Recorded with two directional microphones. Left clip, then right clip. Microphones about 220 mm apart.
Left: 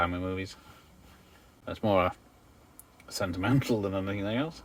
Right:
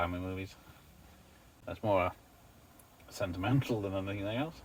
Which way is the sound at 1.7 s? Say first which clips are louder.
Left 4 dB; 45° left (ahead or behind).